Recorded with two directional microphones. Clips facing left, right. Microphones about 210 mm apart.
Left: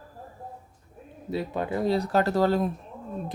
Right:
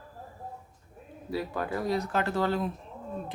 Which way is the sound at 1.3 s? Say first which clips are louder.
Left 3 dB; 25° left (ahead or behind).